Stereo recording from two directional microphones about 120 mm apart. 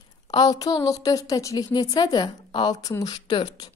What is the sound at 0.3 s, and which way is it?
A woman's voice, 35° left (ahead or behind).